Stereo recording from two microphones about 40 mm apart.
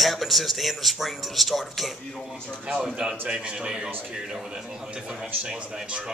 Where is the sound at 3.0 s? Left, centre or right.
Centre.